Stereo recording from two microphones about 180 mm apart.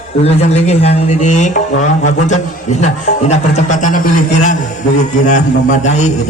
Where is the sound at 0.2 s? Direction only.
35° left (ahead or behind).